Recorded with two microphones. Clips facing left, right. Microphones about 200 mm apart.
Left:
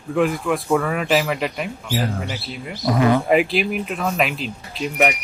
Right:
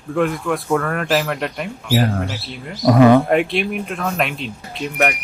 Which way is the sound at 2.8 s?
65° right (ahead or behind).